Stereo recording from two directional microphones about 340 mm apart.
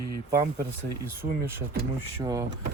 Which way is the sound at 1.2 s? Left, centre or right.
Centre.